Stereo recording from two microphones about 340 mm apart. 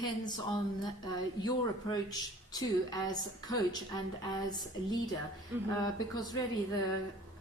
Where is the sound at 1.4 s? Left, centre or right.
Centre.